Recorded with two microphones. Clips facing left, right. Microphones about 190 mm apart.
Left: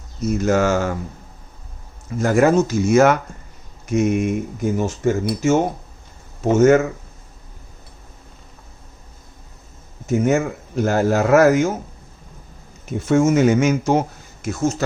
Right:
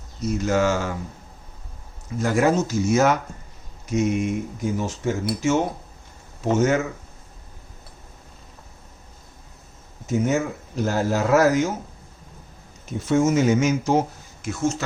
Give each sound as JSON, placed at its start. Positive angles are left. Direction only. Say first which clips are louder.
{"t": 0.3, "sound": "speech", "louder": "left 3 dB", "side_deg": 50}
{"t": 2.2, "sound": "speech", "louder": "left 5 dB", "side_deg": 50}
{"t": 6.6, "sound": "speech", "louder": "left 8 dB", "side_deg": 50}
{"t": 10.1, "sound": "speech", "louder": "left 4 dB", "side_deg": 50}
{"t": 13.1, "sound": "speech", "louder": "left 4 dB", "side_deg": 55}
{"t": 14.4, "sound": "speech", "louder": "left 4 dB", "side_deg": 40}